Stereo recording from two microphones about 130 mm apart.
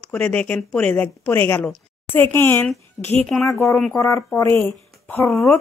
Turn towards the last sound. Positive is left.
turn(degrees=15)  # may be behind; listen again after turning